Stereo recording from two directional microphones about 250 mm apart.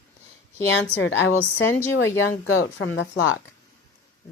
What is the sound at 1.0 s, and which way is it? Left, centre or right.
Speech, left.